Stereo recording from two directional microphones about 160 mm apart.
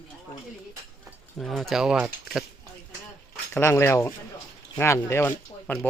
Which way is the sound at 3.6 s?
15° left (ahead or behind).